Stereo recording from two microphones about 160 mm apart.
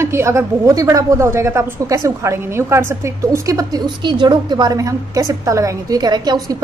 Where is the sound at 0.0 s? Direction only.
15° right (ahead or behind).